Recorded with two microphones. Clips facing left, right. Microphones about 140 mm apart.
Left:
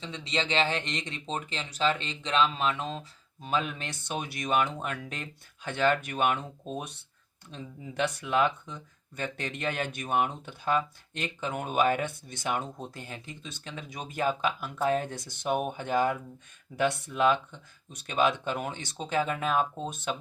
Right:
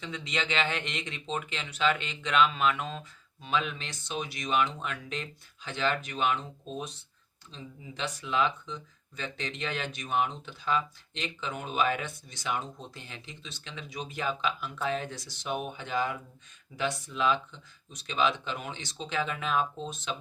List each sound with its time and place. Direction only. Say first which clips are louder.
0.0 s speech: left 2 dB; 30° left (ahead or behind); by 20.1 s 50° left (ahead or behind)